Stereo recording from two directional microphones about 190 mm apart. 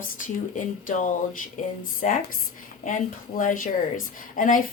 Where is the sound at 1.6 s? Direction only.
45° left (ahead or behind).